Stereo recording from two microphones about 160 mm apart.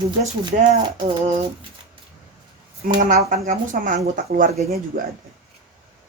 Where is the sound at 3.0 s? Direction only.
60° right (ahead or behind).